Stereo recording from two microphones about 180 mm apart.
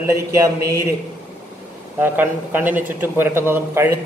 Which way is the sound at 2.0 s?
10° right (ahead or behind).